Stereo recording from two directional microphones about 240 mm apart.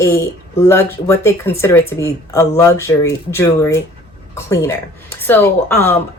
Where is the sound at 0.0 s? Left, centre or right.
Centre.